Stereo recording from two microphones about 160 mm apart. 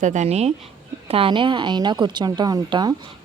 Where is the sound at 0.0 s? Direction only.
50° right (ahead or behind).